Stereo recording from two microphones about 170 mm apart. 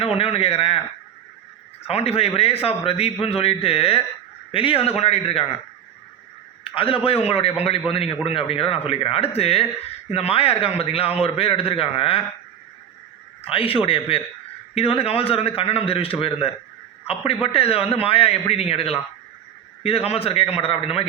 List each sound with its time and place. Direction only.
0.0 s a man's voice: 35° left (ahead or behind)
1.9 s a man's voice: 35° left (ahead or behind)
6.7 s a man's voice: 30° left (ahead or behind)
13.4 s a man's voice: 35° left (ahead or behind)